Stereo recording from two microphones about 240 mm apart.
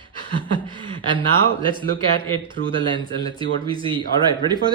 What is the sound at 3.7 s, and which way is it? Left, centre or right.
Speech, right.